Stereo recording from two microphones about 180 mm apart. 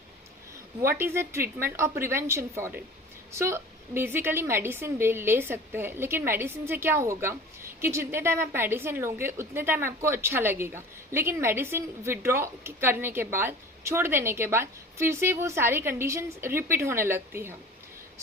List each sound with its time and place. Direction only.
0.8 s a woman's voice: 15° right (ahead or behind)